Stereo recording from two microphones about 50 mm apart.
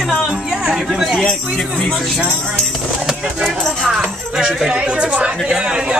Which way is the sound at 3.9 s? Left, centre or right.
Centre.